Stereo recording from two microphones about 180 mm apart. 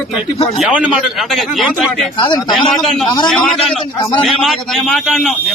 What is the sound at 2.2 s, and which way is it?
Speech, 25° left (ahead or behind).